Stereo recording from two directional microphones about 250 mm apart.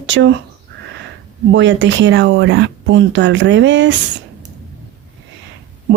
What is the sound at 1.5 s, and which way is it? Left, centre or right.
Speech, right.